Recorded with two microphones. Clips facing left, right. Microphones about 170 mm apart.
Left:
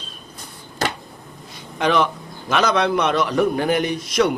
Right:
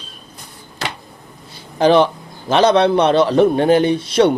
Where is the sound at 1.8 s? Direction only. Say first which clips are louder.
Right 7 dB; 30° right (ahead or behind).